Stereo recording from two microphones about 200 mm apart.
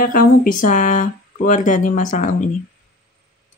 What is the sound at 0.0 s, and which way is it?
Speech, 45° left (ahead or behind).